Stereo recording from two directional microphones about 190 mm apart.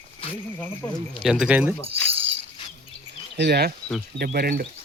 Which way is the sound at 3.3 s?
60° right (ahead or behind).